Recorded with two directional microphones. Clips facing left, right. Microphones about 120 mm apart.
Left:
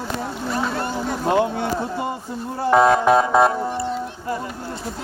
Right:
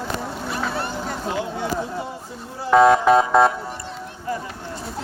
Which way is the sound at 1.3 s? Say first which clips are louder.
Left 6 dB; 60° left (ahead or behind).